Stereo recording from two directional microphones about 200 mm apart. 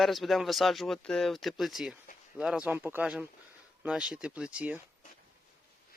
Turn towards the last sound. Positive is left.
turn(degrees=-5)  # may be behind; listen again after turning